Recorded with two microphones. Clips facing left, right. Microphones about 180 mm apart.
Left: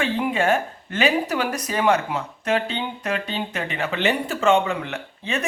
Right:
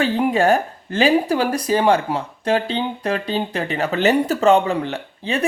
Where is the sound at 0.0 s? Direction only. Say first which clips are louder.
Right 5 dB; 40° right (ahead or behind).